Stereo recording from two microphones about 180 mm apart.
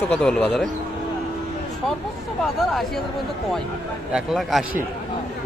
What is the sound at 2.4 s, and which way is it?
Speech, centre (ahead or behind).